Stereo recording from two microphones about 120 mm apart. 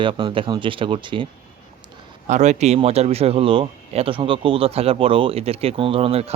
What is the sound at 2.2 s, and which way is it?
Speech, 80° right.